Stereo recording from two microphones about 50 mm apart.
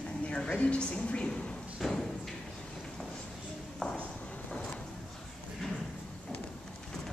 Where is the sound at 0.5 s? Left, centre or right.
Left.